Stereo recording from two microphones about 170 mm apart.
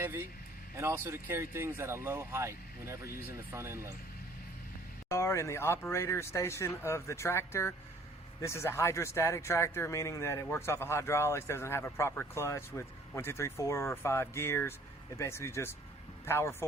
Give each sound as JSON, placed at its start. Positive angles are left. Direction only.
{"t": 0.0, "sound": "speech", "side_deg": -10}
{"t": 5.0, "sound": "speech", "side_deg": 15}